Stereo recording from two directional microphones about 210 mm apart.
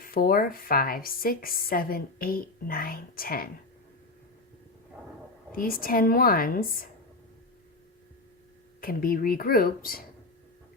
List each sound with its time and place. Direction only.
0.0 s speech: 45° left (ahead or behind)
5.5 s speech: 45° left (ahead or behind)
8.8 s speech: 45° left (ahead or behind)